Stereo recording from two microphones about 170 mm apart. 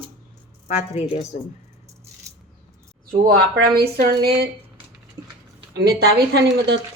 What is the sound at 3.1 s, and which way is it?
A woman's voice, 70° right (ahead or behind).